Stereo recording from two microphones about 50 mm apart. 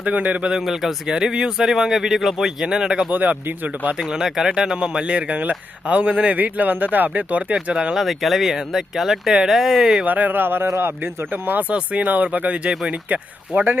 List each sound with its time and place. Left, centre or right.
0.0 s speech: right
0.5 s speech: centre
1.1 s speech: centre
3.1 s speech: right
4.0 s speech: centre
7.9 s speech: centre
10.1 s speech: right
11.3 s speech: right
11.7 s speech: right